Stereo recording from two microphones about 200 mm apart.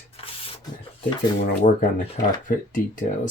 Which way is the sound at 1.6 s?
35° left (ahead or behind).